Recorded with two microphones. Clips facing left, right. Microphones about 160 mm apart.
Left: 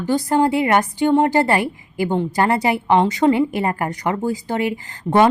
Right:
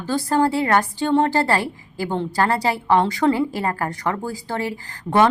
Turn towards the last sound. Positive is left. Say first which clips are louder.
# left 2 dB
turn(degrees=20)  # may be behind; listen again after turning